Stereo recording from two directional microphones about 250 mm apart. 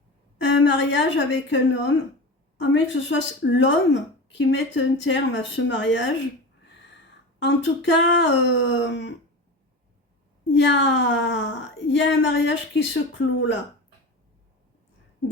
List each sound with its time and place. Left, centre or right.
0.4 s a woman's voice: left
7.3 s a woman's voice: left
10.5 s a woman's voice: left